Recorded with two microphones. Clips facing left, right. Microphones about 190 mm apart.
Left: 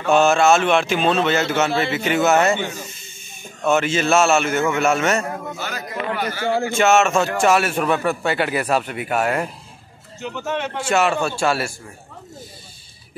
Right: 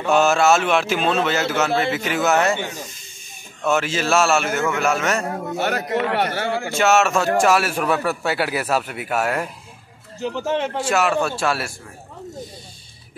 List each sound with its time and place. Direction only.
0.1 s a man's voice: centre (ahead or behind)
3.6 s a man's voice: centre (ahead or behind)
5.6 s a man's voice: 65° right (ahead or behind)
6.8 s a man's voice: centre (ahead or behind)
10.2 s speech: 30° right (ahead or behind)
10.8 s a man's voice: centre (ahead or behind)